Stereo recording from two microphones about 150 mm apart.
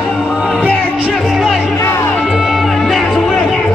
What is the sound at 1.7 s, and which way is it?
Music, 15° left (ahead or behind).